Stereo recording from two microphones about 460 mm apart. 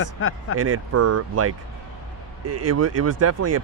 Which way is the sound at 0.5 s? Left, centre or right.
Right.